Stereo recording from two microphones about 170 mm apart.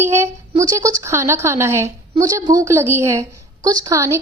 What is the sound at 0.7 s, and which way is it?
A woman's voice, 20° right (ahead or behind).